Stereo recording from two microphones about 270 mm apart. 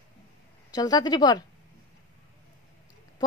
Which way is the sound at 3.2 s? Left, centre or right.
Centre.